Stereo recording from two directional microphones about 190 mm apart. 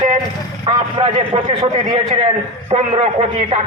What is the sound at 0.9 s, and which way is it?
A man's voice, 25° right (ahead or behind).